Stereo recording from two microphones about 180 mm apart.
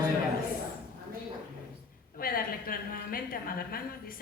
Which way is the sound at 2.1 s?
55° left (ahead or behind).